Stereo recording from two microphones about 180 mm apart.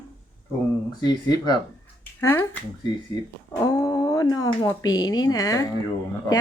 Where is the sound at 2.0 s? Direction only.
10° left (ahead or behind).